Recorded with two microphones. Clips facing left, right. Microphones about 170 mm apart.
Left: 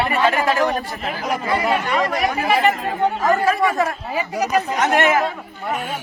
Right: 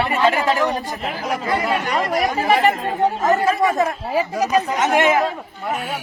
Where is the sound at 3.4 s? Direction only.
20° right (ahead or behind).